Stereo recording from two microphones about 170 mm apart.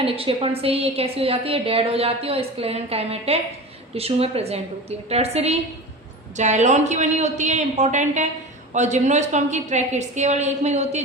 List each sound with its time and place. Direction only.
0.0 s a woman's voice: 35° right (ahead or behind)